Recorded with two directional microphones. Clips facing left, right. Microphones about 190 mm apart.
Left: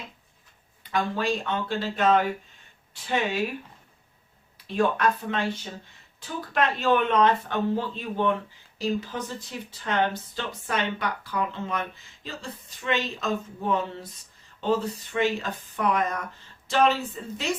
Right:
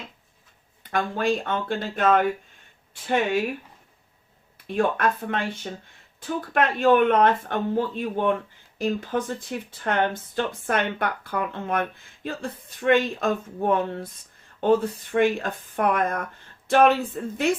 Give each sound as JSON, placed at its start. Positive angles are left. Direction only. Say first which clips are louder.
{"t": 0.9, "sound": "speech", "louder": "right 2 dB", "side_deg": -50}
{"t": 4.6, "sound": "speech", "louder": "right 1 dB", "side_deg": -55}
{"t": 6.5, "sound": "speech", "louder": "right 4 dB", "side_deg": -55}